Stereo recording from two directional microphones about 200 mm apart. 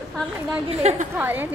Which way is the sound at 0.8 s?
35° right (ahead or behind).